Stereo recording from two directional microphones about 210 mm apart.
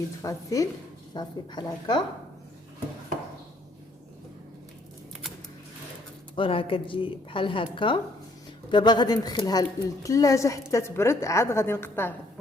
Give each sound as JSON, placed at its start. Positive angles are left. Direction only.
{"t": 0.2, "sound": "a woman's voice", "side_deg": 15}
{"t": 6.3, "sound": "a woman's voice", "side_deg": 25}